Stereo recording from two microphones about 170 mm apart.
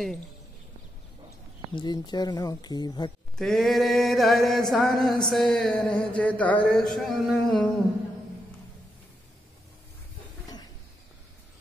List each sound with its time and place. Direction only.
1.8 s speech: 25° left (ahead or behind)
3.3 s chant: centre (ahead or behind)